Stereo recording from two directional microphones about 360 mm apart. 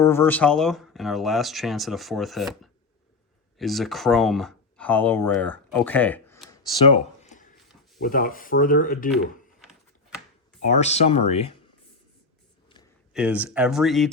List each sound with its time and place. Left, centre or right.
0.0 s speech: centre
3.6 s speech: centre; by 9.0 s left
10.6 s speech: centre
13.1 s speech: centre